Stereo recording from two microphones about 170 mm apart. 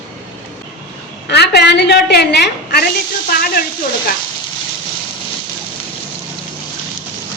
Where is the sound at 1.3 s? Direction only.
75° left (ahead or behind).